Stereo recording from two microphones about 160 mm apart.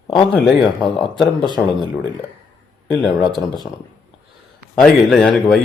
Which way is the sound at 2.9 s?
Centre (ahead or behind).